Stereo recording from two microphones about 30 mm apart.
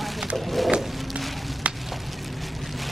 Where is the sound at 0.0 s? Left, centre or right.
Centre.